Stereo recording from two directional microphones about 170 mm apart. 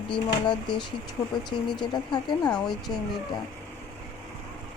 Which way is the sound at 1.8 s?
25° left (ahead or behind).